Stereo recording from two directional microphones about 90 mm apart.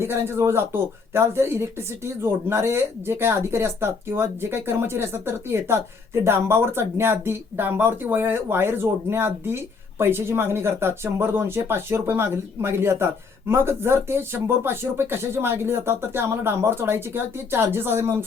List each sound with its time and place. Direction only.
0.0 s speech: 30° right (ahead or behind)